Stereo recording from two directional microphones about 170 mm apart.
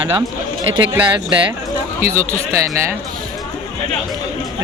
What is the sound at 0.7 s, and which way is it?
Speech, 30° right (ahead or behind).